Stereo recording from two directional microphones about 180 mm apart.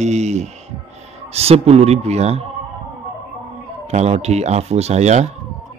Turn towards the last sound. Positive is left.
turn(degrees=-40)  # may be behind; listen again after turning